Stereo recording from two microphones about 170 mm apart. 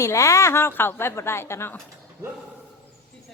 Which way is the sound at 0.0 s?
15° left (ahead or behind).